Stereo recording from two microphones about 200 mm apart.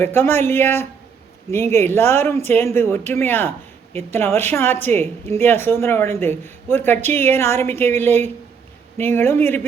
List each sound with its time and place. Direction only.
0.0 s a woman's voice: 10° left (ahead or behind)